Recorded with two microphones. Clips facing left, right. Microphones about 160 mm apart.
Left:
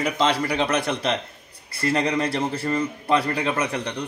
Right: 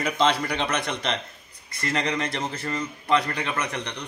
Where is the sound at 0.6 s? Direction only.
35° left (ahead or behind).